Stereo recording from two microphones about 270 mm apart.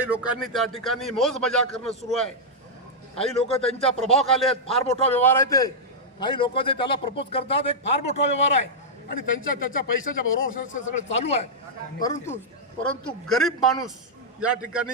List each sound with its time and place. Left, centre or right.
0.0 s a man's voice: centre
3.2 s a man's voice: left
4.0 s a man's voice: centre; by 8.1 s left
9.1 s a man's voice: left
10.0 s speech: left
10.5 s a man's voice: left
12.0 s a man's voice: centre